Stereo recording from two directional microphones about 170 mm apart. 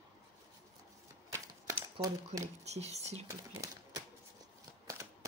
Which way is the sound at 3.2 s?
20° right (ahead or behind).